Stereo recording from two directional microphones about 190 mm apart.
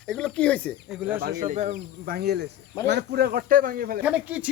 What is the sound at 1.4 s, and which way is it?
Speech, 40° right (ahead or behind).